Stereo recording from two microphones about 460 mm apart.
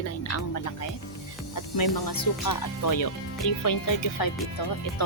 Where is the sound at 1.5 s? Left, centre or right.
Left.